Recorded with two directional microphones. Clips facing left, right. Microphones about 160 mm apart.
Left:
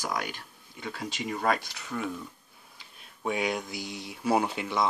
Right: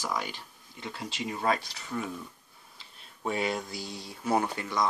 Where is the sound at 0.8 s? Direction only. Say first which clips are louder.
Left 1 dB; centre (ahead or behind).